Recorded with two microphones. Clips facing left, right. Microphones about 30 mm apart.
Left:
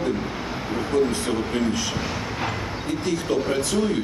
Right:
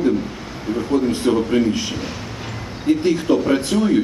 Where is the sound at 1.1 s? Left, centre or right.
Right.